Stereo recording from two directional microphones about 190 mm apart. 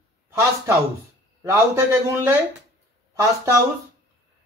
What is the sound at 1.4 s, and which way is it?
Speech, 15° right (ahead or behind).